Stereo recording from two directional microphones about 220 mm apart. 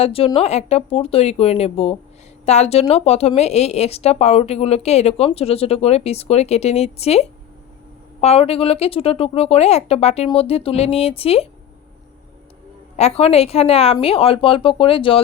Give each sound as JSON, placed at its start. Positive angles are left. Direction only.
{"t": 0.0, "sound": "speech", "side_deg": 25}
{"t": 13.0, "sound": "speech", "side_deg": 30}